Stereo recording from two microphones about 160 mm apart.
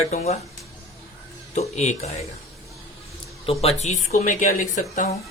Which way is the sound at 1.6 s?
45° left (ahead or behind).